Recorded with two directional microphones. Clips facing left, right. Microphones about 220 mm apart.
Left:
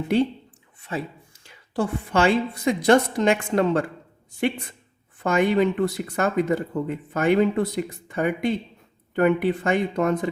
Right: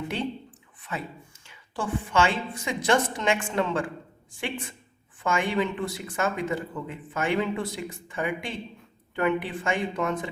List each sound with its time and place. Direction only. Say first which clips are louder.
0.9 s speech: left 5 dB; 30° left (ahead or behind)